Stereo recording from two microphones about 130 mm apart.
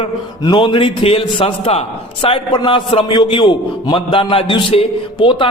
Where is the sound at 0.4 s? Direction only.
35° left (ahead or behind).